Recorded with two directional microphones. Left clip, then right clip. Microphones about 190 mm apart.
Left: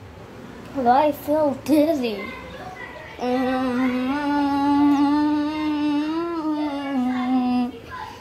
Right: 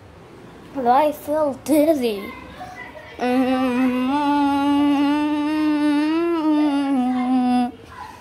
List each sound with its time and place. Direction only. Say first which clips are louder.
0.8 s a child's voice: right 1 dB; 20° right (ahead or behind)
3.2 s humming: right 3 dB; 40° right (ahead or behind)
7.3 s a sound: right 4 dB; 35° right (ahead or behind)